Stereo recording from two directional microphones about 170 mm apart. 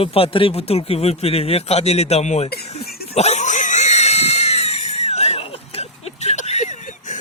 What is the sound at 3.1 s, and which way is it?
Screaming, 40° left (ahead or behind).